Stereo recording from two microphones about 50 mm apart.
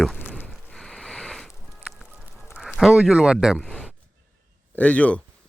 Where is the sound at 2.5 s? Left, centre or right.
Centre.